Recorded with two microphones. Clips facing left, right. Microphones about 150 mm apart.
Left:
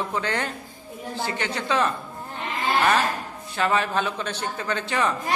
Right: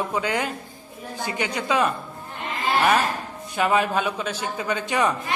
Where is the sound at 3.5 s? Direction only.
15° right (ahead or behind).